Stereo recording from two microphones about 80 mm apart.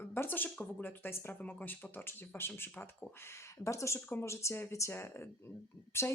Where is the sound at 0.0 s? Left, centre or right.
Left.